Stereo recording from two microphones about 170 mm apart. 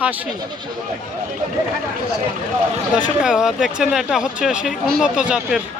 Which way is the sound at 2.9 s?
5° right (ahead or behind).